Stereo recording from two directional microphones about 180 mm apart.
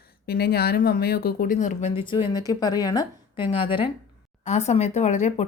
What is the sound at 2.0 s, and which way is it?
A woman's voice, 25° left (ahead or behind).